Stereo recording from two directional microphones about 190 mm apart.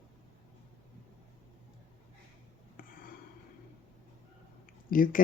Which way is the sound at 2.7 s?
50° left (ahead or behind).